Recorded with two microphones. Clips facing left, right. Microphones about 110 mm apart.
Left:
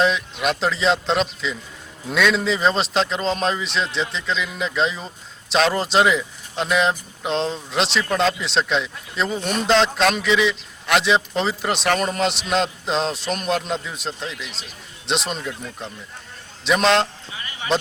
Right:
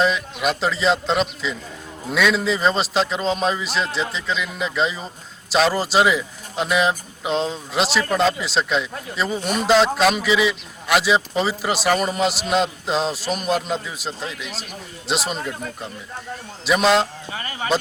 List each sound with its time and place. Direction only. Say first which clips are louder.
0.0 s a man's voice: even; centre (ahead or behind)
16.6 s speech: even; 5° right (ahead or behind)
17.3 s speech: right 6 dB; 40° right (ahead or behind)